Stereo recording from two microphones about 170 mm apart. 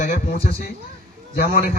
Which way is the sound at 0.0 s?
35° left (ahead or behind).